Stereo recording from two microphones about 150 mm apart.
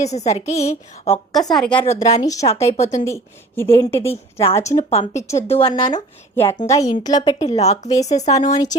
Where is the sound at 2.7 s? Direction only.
50° left (ahead or behind).